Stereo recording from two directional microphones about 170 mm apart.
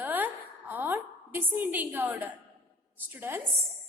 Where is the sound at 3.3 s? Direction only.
15° right (ahead or behind).